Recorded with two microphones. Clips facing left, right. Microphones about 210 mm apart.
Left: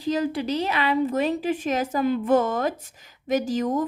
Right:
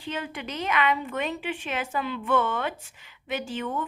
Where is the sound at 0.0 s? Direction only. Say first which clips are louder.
Left 10 dB; 35° left (ahead or behind).